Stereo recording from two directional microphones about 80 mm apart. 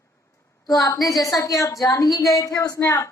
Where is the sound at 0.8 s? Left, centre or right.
Left.